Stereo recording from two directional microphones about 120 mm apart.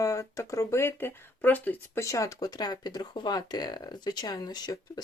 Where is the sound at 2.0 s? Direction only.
30° left (ahead or behind).